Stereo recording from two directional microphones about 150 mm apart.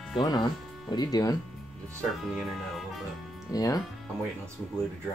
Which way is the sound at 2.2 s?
Centre (ahead or behind).